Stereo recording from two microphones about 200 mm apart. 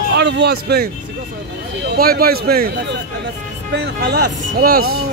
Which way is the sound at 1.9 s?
50° right (ahead or behind).